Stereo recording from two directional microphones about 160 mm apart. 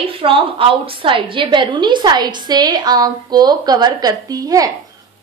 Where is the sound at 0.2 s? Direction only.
35° right (ahead or behind).